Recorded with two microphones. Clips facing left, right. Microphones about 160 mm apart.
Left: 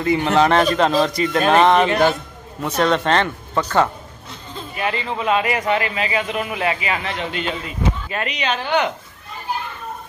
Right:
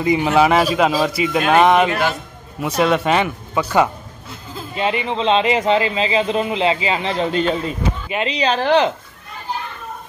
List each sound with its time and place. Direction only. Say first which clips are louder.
0.0 s a man's voice: right 1 dB; 15° right (ahead or behind)
4.7 s speech: right 4 dB; 20° right (ahead or behind)